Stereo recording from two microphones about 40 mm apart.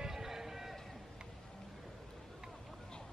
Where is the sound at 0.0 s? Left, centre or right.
Centre.